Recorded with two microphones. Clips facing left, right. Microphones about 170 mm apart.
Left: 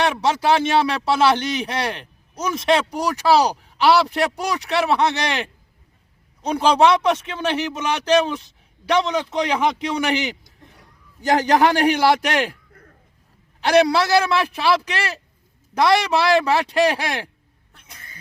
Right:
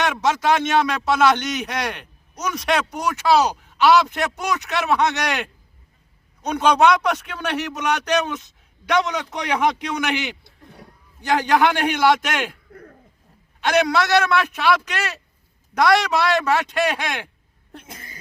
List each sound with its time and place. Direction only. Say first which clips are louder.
0.0 s a man's voice: left 1 dB; 30° left (ahead or behind)
11.2 s a man's voice: left 2 dB; 40° left (ahead or behind)
12.7 s cough: right 8 dB; 40° right (ahead or behind)
13.7 s a man's voice: left 3 dB; 30° left (ahead or behind)
17.7 s cat: right 12 dB; 55° right (ahead or behind)